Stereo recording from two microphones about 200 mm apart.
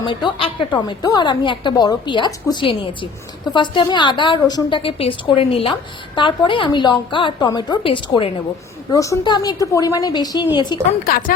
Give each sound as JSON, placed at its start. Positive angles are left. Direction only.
{"t": 0.0, "sound": "a woman's voice", "side_deg": 25}
{"t": 11.0, "sound": "a woman's voice", "side_deg": 45}